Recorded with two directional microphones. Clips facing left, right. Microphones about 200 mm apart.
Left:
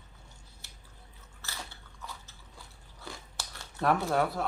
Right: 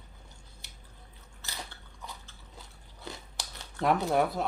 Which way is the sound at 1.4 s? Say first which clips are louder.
Even; 20° right (ahead or behind).